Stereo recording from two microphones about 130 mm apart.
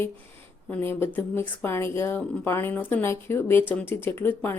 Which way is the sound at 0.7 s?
15° left (ahead or behind).